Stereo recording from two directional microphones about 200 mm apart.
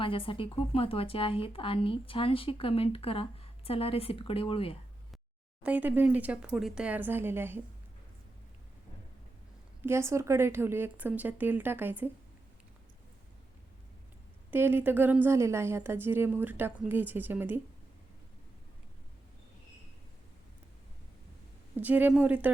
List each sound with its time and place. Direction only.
0.0 s a woman's voice: 25° left (ahead or behind)
5.6 s a woman's voice: 5° right (ahead or behind)
9.8 s a woman's voice: 15° right (ahead or behind)
14.5 s a woman's voice: 10° right (ahead or behind)
21.8 s a woman's voice: 10° right (ahead or behind)